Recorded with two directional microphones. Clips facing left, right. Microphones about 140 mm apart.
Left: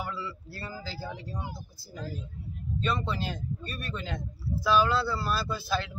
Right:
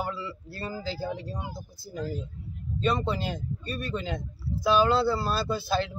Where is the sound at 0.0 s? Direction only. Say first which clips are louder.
Right 3 dB; 20° right (ahead or behind).